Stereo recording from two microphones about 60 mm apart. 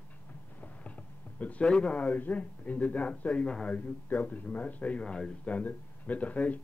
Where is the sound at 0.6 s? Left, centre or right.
Left.